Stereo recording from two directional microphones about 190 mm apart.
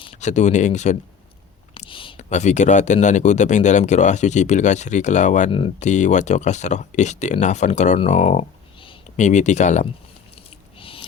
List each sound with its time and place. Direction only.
0.0 s speech: 40° left (ahead or behind)
1.7 s speech: 25° left (ahead or behind)
5.5 s speech: 30° left (ahead or behind)
10.3 s squish: 30° left (ahead or behind)